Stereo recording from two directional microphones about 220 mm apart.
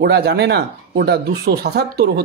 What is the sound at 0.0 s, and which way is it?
Speech, 45° right (ahead or behind).